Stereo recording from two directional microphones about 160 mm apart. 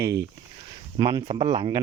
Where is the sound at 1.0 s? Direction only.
30° right (ahead or behind).